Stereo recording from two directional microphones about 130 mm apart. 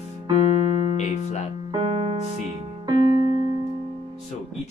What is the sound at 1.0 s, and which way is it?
Music, 60° left (ahead or behind).